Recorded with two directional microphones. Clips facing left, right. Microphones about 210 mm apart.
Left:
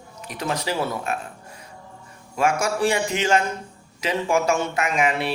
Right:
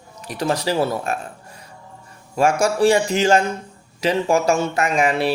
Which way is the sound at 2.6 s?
35° right (ahead or behind).